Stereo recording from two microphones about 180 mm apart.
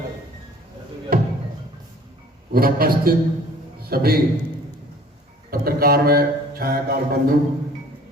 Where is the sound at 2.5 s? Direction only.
55° right (ahead or behind).